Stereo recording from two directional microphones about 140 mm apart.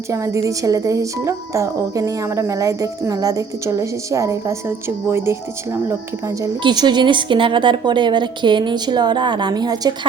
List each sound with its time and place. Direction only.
0.1 s a woman's voice: 20° right (ahead or behind)
6.6 s a woman's voice: 30° right (ahead or behind)